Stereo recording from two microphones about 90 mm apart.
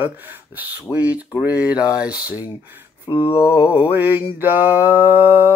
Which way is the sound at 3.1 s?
60° left (ahead or behind).